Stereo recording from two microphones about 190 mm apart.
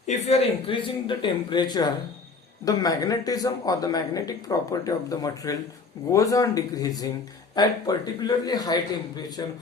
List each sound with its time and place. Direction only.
0.1 s speech: 35° left (ahead or behind)